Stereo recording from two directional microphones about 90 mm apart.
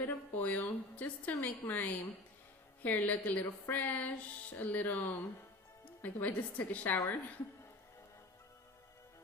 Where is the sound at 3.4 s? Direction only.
20° left (ahead or behind).